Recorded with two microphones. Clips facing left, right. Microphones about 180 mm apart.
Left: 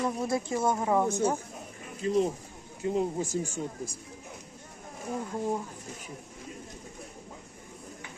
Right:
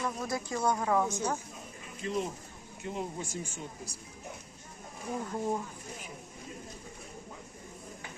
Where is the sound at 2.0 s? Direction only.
35° left (ahead or behind).